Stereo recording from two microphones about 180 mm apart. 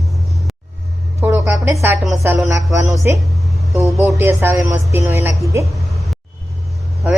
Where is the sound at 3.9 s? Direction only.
Centre (ahead or behind).